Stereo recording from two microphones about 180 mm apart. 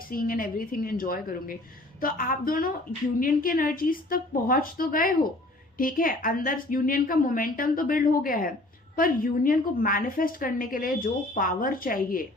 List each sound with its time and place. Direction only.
0.1 s a woman's voice: 50° left (ahead or behind)